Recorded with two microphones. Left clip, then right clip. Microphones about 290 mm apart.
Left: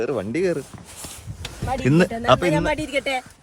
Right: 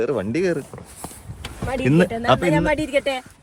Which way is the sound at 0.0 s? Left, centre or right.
Centre.